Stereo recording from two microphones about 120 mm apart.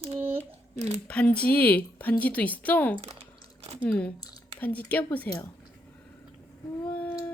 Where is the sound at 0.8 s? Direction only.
60° right (ahead or behind).